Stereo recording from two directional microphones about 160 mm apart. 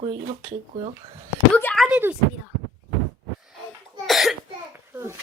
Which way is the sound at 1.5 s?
10° left (ahead or behind).